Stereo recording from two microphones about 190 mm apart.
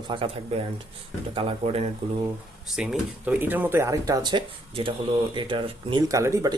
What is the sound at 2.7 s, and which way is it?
Speech, centre (ahead or behind).